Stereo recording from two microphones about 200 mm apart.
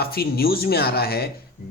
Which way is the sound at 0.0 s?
50° left (ahead or behind).